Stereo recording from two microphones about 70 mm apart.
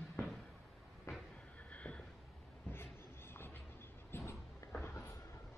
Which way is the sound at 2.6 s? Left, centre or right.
Left.